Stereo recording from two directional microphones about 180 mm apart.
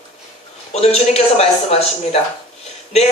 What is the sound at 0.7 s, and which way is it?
Speech, 35° left (ahead or behind).